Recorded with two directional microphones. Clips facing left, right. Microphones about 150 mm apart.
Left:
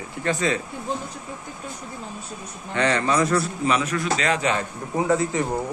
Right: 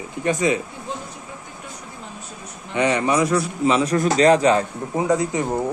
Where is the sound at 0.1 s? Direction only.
20° right (ahead or behind).